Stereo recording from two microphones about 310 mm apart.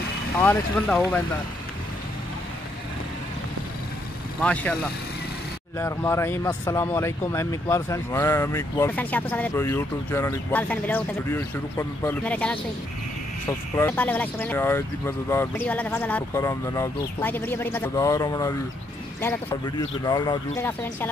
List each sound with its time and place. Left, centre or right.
0.4 s speech: centre
4.4 s speech: centre
5.8 s speech: centre